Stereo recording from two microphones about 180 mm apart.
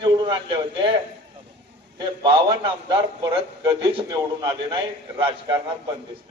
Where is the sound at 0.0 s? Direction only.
25° right (ahead or behind).